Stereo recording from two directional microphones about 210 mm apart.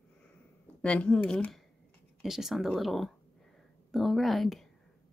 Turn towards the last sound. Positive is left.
turn(degrees=0)  # may be behind; listen again after turning